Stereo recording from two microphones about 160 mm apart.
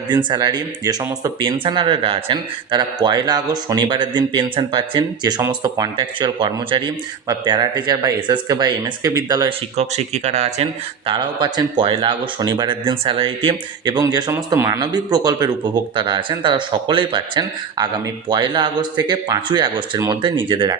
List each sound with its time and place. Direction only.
0.1 s speech: 30° right (ahead or behind)
9.5 s speech: 40° right (ahead or behind)